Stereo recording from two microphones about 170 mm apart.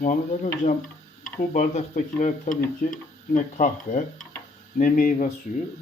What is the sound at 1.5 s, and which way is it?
Speech, 50° left (ahead or behind).